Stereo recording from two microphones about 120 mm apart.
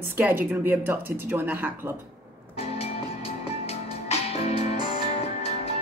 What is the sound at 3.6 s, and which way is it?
Music, 60° left (ahead or behind).